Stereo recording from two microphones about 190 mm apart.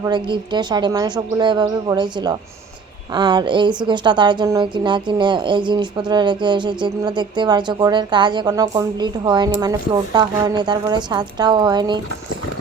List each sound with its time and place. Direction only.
0.0 s a woman's voice: 25° right (ahead or behind)